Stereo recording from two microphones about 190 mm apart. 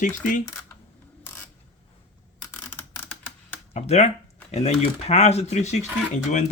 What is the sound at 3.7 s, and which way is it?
Speech, 35° left (ahead or behind).